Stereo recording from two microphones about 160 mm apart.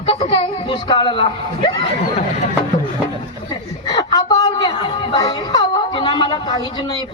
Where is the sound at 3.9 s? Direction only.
25° left (ahead or behind).